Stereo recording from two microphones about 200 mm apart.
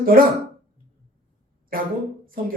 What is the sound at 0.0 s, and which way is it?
Speech, 45° right (ahead or behind).